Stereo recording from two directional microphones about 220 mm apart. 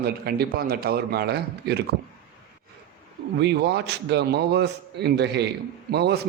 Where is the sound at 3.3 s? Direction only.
50° right (ahead or behind).